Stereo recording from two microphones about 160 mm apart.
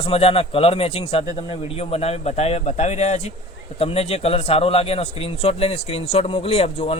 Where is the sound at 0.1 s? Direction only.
40° left (ahead or behind).